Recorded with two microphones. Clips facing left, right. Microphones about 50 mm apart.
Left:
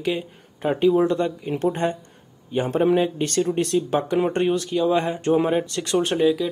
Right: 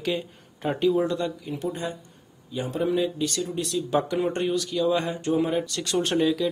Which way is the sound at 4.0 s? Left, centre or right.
Left.